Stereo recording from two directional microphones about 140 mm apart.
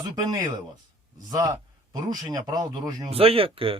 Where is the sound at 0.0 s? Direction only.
30° right (ahead or behind).